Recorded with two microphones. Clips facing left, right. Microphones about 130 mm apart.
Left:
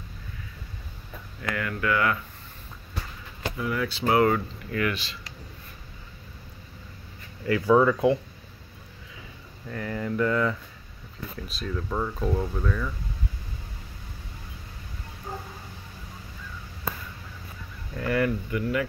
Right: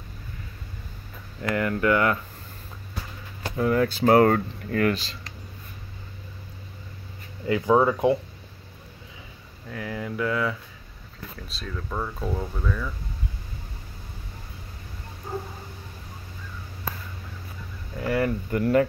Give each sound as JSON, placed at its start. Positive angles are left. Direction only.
{"t": 1.4, "sound": "speech", "side_deg": -35}
{"t": 3.5, "sound": "speech", "side_deg": -40}
{"t": 7.4, "sound": "speech", "side_deg": -20}
{"t": 9.7, "sound": "speech", "side_deg": -5}
{"t": 17.9, "sound": "speech", "side_deg": -20}
{"t": 18.5, "sound": "speech", "side_deg": -45}